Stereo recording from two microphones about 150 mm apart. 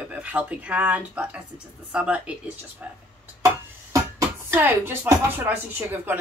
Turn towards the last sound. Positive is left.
turn(degrees=-15)  # may be behind; listen again after turning